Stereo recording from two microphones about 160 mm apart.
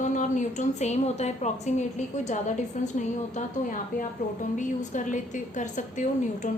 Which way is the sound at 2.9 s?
50° left (ahead or behind).